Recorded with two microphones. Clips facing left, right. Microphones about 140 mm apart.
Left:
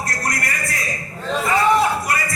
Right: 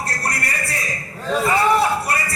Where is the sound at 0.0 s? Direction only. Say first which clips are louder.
Even; 30° right (ahead or behind).